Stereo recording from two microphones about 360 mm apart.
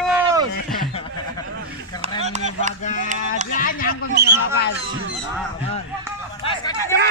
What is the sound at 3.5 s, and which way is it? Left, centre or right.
Speech, left.